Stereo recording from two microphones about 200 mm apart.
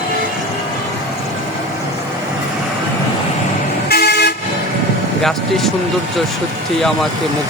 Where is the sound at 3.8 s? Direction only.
55° left (ahead or behind).